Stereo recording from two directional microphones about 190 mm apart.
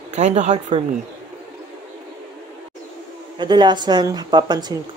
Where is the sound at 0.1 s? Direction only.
35° right (ahead or behind).